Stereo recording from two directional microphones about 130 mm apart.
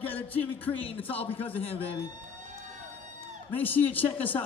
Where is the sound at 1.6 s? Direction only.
45° left (ahead or behind).